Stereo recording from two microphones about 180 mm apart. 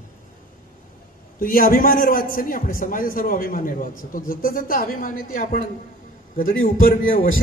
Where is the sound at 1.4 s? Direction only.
50° left (ahead or behind).